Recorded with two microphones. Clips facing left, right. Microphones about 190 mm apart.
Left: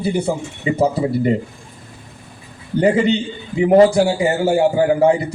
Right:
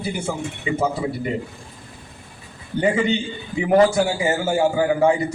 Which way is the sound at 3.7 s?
30° left (ahead or behind).